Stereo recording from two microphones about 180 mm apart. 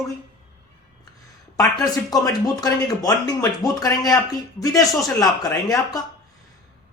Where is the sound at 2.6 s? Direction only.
20° left (ahead or behind).